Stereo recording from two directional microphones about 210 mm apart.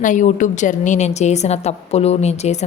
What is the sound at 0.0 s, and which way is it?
A woman's voice, 35° left (ahead or behind).